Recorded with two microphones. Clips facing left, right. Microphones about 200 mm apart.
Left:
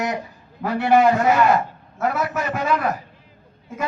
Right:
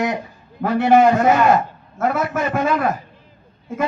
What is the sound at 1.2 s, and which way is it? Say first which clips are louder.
Speech: right 2 dB; 50° right (ahead or behind).